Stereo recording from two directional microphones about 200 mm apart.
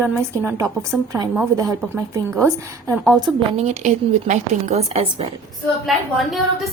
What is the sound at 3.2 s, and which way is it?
A woman's voice, 35° right (ahead or behind).